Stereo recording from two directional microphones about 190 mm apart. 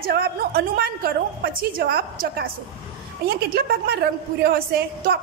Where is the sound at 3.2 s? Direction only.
55° right (ahead or behind).